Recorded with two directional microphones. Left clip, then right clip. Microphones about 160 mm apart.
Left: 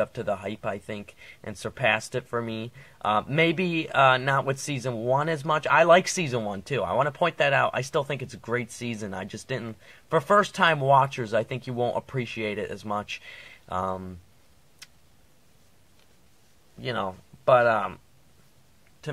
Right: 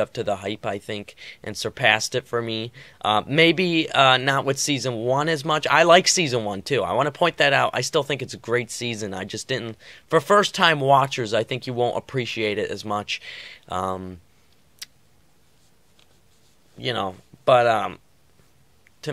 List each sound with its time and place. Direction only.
0.0 s speech: 35° right (ahead or behind)
16.8 s speech: 35° right (ahead or behind)